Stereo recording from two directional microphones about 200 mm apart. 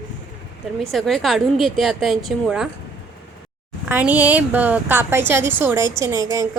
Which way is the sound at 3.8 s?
10° right (ahead or behind).